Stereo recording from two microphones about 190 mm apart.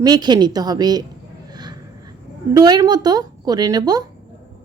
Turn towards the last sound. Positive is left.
turn(degrees=-20)  # may be behind; listen again after turning